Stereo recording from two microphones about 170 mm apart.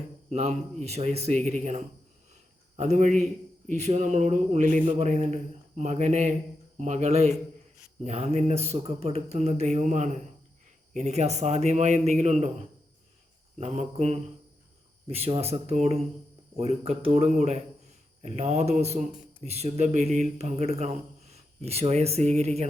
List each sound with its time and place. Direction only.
0.3 s a man's voice: 40° right (ahead or behind)
13.6 s speech: 40° right (ahead or behind)